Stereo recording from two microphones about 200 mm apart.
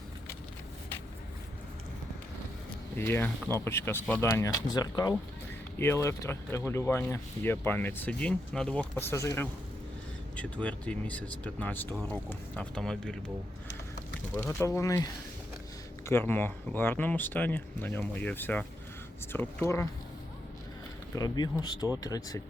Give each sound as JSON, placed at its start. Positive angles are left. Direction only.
{"t": 3.0, "sound": "speech", "side_deg": 10}
{"t": 14.3, "sound": "speech", "side_deg": 15}
{"t": 21.2, "sound": "speech", "side_deg": 20}